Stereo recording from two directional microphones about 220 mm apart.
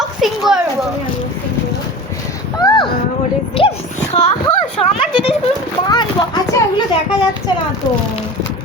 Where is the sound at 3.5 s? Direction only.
25° left (ahead or behind).